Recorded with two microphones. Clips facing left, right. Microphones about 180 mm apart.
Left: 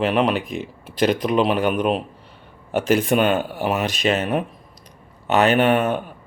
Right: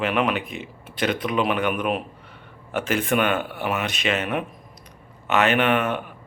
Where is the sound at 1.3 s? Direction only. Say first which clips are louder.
Left 4 dB; 35° left (ahead or behind).